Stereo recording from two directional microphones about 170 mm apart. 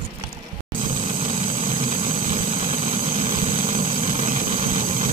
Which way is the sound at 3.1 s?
55° right (ahead or behind).